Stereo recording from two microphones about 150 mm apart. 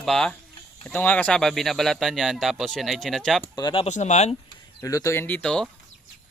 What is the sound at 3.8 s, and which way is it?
Speech, 50° left (ahead or behind).